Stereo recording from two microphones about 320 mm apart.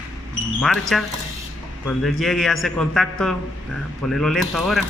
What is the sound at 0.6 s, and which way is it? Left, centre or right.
A man's voice, centre.